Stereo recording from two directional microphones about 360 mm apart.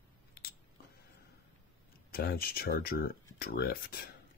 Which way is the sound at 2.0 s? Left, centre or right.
Left.